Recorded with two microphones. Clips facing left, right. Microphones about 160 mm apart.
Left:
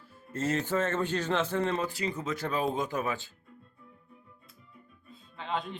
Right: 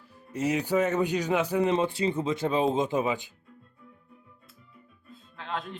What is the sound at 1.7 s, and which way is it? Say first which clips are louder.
Speech: right 6 dB; 25° right (ahead or behind).